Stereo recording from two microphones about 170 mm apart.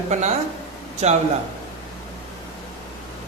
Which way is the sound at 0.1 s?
40° right (ahead or behind).